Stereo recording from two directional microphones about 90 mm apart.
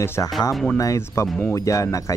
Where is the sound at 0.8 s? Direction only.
35° left (ahead or behind).